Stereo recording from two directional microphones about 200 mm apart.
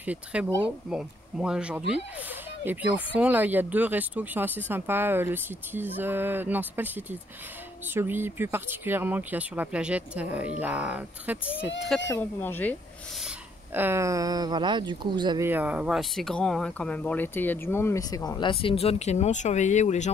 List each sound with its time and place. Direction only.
0.0 s speech: 5° right (ahead or behind)
12.1 s speech: 10° left (ahead or behind)
13.7 s speech: 10° right (ahead or behind)
15.4 s speech: 10° right (ahead or behind); by 20.1 s 35° left (ahead or behind)